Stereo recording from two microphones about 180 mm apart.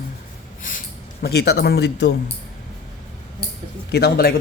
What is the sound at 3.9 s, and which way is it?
Speech, 60° left (ahead or behind).